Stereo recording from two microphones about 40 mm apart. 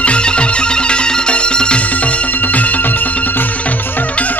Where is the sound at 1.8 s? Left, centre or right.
Left.